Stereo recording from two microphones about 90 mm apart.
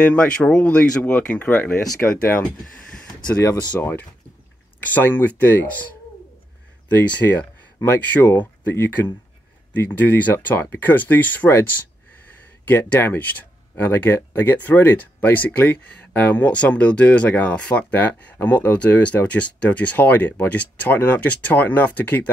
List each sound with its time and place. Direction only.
0.0 s speech: 15° left (ahead or behind)
2.6 s a sound: 10° left (ahead or behind)
4.7 s speech: 20° left (ahead or behind)
6.9 s speech: 20° left (ahead or behind)